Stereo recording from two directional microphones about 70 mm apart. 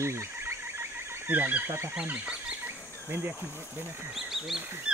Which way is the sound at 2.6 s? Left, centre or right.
Right.